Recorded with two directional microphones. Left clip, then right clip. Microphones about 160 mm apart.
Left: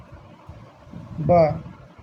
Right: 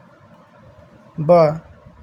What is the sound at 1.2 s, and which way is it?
Speech, 60° right (ahead or behind).